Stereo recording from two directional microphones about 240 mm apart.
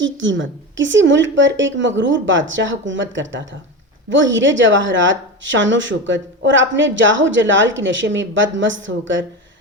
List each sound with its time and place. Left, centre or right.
0.0 s a woman's voice: right